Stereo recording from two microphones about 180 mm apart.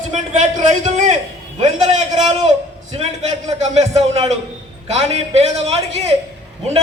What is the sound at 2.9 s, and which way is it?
A man's voice, 30° right (ahead or behind).